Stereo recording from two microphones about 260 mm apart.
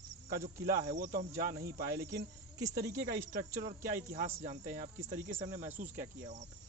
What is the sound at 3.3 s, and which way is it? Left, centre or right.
Speech, right.